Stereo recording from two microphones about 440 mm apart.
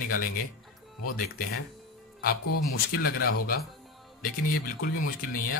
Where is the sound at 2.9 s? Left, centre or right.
Left.